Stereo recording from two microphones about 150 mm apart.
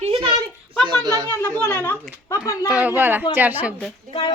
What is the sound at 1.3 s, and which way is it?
A woman's voice, 15° left (ahead or behind).